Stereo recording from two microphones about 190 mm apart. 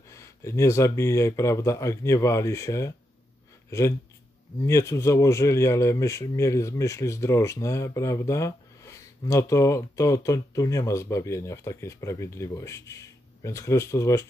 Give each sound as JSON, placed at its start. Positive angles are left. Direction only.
{"t": 0.1, "sound": "speech", "side_deg": 15}